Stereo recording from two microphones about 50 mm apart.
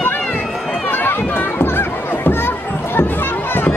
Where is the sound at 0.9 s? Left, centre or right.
Left.